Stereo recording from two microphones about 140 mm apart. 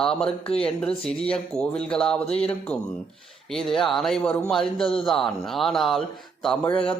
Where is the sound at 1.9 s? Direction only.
5° left (ahead or behind).